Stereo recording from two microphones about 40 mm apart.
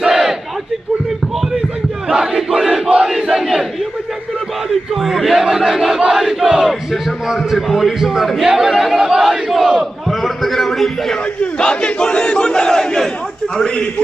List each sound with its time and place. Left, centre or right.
0.0 s battle cry: centre
2.0 s crowd: centre
4.9 s battle cry: centre
8.1 s a man's voice: centre
8.5 s battle cry: centre
10.1 s a sound: centre
11.3 s battle cry: left